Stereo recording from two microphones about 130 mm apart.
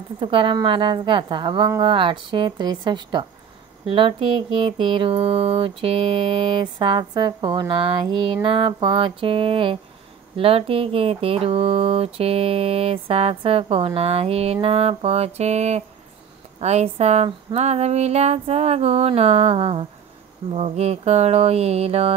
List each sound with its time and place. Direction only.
0.2 s speech: 40° right (ahead or behind)